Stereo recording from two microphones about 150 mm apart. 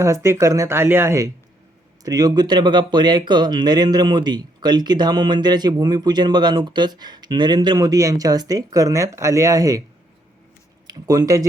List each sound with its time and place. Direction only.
0.0 s speech: 20° right (ahead or behind)
10.8 s speech: 25° right (ahead or behind)